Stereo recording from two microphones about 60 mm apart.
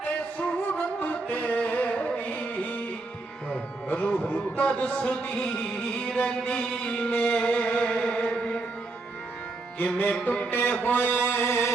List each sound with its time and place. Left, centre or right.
0.3 s music: left
3.5 s speech: left
4.7 s music: left
10.2 s speech: left
10.8 s mantra: left